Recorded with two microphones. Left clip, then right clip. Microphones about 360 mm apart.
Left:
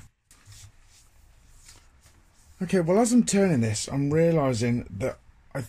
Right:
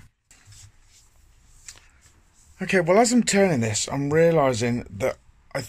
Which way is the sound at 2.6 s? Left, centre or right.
Right.